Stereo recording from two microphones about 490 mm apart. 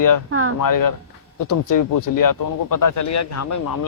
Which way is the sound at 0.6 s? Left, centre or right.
Left.